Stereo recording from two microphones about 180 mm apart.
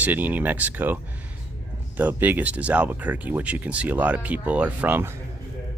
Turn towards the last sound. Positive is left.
turn(degrees=-10)  # may be behind; listen again after turning